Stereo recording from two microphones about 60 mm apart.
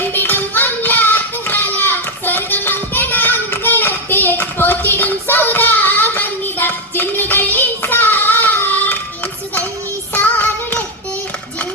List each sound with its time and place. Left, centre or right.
0.0 s child singing: left
10.2 s child singing: left